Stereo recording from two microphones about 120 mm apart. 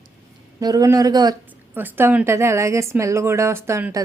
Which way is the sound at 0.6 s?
30° right (ahead or behind).